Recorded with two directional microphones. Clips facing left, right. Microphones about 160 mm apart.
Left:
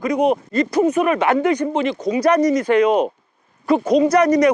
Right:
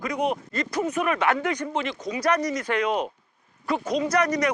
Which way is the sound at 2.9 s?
45° left (ahead or behind).